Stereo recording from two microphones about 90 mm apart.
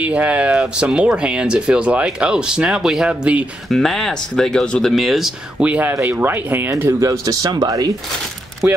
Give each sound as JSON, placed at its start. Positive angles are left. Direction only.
{"t": 0.0, "sound": "speech", "side_deg": -15}
{"t": 3.6, "sound": "speech", "side_deg": 5}
{"t": 5.6, "sound": "speech", "side_deg": -15}
{"t": 8.6, "sound": "speech", "side_deg": -15}